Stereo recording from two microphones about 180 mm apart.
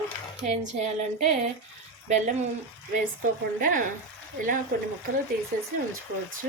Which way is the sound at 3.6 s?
50° right (ahead or behind).